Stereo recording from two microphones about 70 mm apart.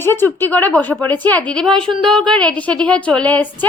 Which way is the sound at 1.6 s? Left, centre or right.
Centre.